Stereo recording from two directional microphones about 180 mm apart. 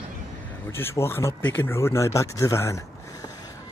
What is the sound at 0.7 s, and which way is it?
Speech, 15° left (ahead or behind).